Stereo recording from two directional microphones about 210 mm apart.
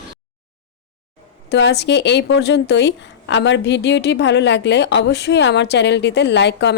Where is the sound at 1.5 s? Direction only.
55° left (ahead or behind).